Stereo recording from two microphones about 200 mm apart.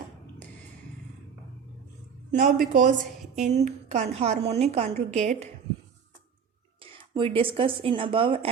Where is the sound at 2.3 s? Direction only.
40° right (ahead or behind).